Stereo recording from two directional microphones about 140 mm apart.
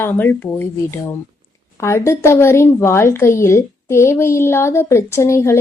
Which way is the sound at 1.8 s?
20° left (ahead or behind).